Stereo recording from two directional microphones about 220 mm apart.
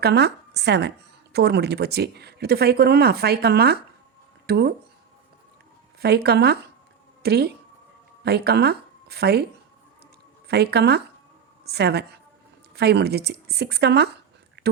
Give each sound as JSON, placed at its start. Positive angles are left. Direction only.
{"t": 0.0, "sound": "speech", "side_deg": -50}
{"t": 6.0, "sound": "speech", "side_deg": -45}
{"t": 10.5, "sound": "a woman's voice", "side_deg": -45}
{"t": 14.6, "sound": "a sound", "side_deg": -50}